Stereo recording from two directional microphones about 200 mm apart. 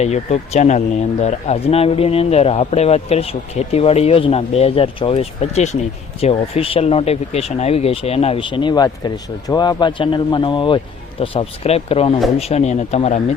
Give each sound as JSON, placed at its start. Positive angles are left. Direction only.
{"t": 0.0, "sound": "speech", "side_deg": 35}